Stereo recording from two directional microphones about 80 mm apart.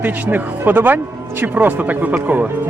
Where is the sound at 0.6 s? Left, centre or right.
Right.